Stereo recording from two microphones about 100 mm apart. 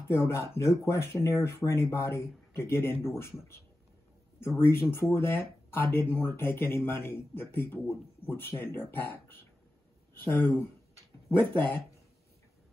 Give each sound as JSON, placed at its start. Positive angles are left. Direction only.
{"t": 0.1, "sound": "speech", "side_deg": 30}
{"t": 4.6, "sound": "speech", "side_deg": 25}